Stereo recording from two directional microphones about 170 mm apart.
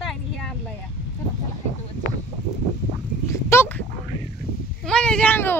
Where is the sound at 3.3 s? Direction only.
15° left (ahead or behind).